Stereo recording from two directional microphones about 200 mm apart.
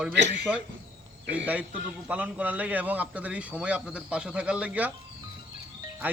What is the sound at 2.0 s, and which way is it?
A man's voice, 5° right (ahead or behind).